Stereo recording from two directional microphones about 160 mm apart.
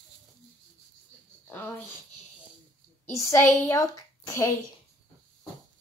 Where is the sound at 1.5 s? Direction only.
10° left (ahead or behind).